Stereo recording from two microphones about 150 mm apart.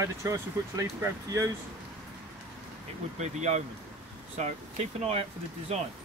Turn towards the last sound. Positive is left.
turn(degrees=-45)  # may be behind; listen again after turning